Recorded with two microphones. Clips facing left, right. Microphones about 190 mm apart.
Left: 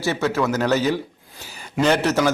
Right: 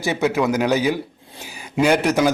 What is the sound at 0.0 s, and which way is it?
A man's voice, 15° right (ahead or behind).